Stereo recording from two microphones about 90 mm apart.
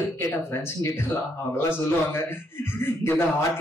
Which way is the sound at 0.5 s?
25° left (ahead or behind).